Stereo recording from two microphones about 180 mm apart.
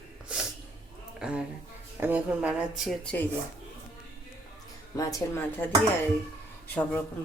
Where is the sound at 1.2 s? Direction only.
5° right (ahead or behind).